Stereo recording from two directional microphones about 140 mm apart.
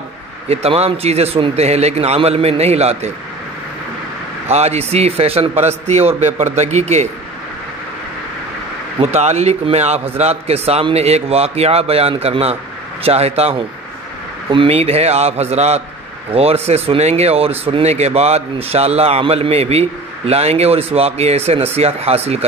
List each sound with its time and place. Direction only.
0.5 s speech: 45° right (ahead or behind)
4.5 s speech: 50° right (ahead or behind)
9.0 s speech: 50° right (ahead or behind)